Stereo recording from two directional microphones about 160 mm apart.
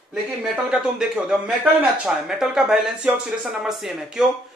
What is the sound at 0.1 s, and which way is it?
A man's voice, 5° right (ahead or behind).